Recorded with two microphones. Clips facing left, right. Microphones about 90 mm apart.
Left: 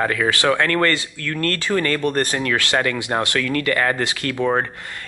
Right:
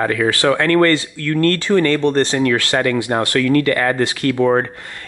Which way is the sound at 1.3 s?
25° right (ahead or behind).